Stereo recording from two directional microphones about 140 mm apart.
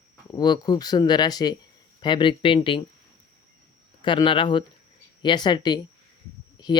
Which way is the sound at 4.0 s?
35° left (ahead or behind).